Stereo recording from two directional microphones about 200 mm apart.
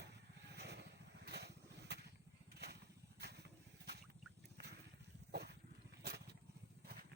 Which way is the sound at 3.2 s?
55° right (ahead or behind).